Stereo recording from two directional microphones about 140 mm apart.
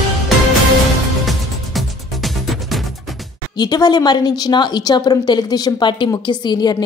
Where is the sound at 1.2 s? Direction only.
Centre (ahead or behind).